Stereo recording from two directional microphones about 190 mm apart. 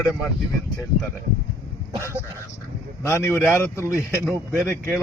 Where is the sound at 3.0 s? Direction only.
15° left (ahead or behind).